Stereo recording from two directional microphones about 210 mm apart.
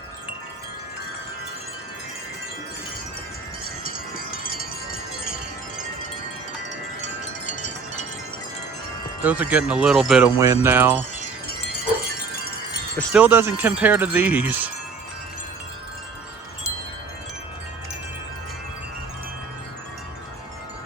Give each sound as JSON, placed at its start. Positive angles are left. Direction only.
{"t": 3.8, "sound": "wind chime", "side_deg": 45}
{"t": 7.4, "sound": "wind chime", "side_deg": 35}
{"t": 9.2, "sound": "speech", "side_deg": -5}
{"t": 10.3, "sound": "speech", "side_deg": -15}
{"t": 13.1, "sound": "speech", "side_deg": -10}